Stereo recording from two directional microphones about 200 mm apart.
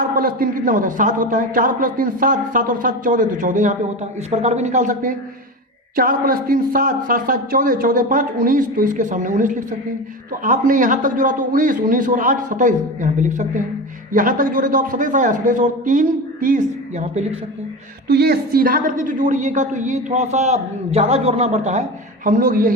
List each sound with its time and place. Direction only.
0.2 s a man's voice: 45° right (ahead or behind)
18.1 s a man's voice: 50° right (ahead or behind)